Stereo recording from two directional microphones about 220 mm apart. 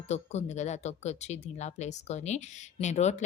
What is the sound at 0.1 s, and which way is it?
Speech, 30° left (ahead or behind).